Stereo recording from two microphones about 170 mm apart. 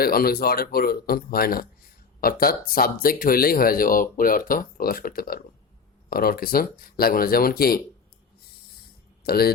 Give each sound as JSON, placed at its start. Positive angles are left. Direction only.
{"t": 0.0, "sound": "speech", "side_deg": 60}
{"t": 9.2, "sound": "speech", "side_deg": 65}